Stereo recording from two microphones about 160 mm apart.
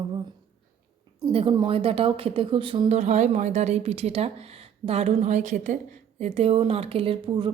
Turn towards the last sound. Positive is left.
turn(degrees=-30)  # may be behind; listen again after turning